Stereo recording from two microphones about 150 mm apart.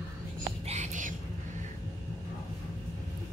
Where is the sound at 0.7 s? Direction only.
55° right (ahead or behind).